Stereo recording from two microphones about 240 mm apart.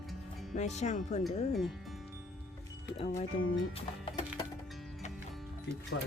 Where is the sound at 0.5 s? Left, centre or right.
Left.